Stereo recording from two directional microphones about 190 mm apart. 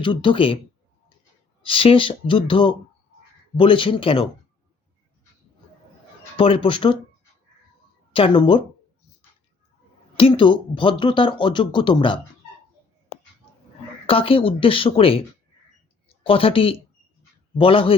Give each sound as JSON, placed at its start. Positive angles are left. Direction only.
{"t": 0.0, "sound": "speech", "side_deg": 25}
{"t": 1.6, "sound": "speech", "side_deg": 30}
{"t": 6.3, "sound": "speech", "side_deg": 30}
{"t": 8.1, "sound": "speech", "side_deg": 25}
{"t": 10.2, "sound": "speech", "side_deg": 25}
{"t": 14.1, "sound": "speech", "side_deg": 30}